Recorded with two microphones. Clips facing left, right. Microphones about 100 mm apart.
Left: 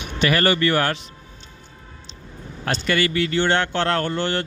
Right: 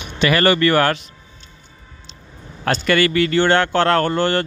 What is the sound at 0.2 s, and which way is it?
Speech, 90° right.